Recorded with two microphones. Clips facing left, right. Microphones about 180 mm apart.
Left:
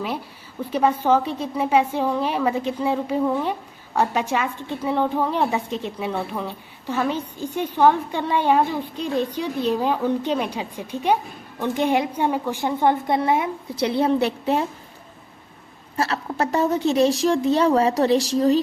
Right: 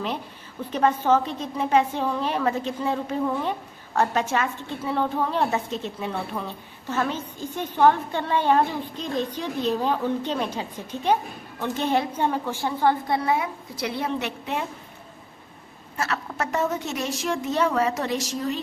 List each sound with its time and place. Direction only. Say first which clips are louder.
0.6 s a woman's voice: left 2 dB; 10° left (ahead or behind); by 14.6 s 35° left (ahead or behind)
16.0 s a woman's voice: left 5 dB; 30° left (ahead or behind)